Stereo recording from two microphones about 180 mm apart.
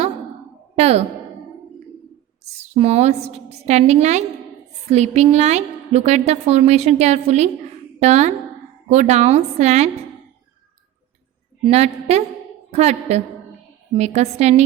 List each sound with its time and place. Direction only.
0.8 s a woman's voice: 35° right (ahead or behind)
2.7 s a woman's voice: 35° right (ahead or behind)
11.6 s a woman's voice: 35° right (ahead or behind)